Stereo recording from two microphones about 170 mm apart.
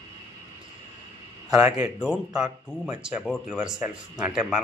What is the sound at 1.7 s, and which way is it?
Speech, 5° right (ahead or behind).